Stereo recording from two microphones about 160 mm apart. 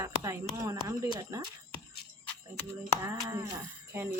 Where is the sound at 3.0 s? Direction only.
20° right (ahead or behind).